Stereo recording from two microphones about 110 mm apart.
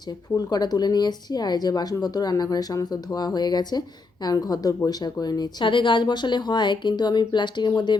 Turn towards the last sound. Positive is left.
turn(degrees=40)  # may be behind; listen again after turning